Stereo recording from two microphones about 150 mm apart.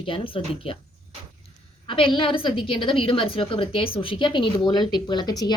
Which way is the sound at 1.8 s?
35° left (ahead or behind).